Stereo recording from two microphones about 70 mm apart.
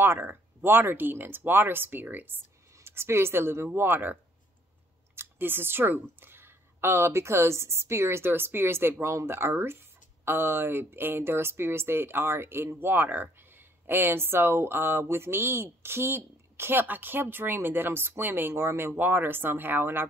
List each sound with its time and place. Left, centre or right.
0.0 s speech: right